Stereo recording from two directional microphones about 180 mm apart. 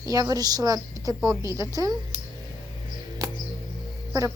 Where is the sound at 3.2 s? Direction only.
20° right (ahead or behind).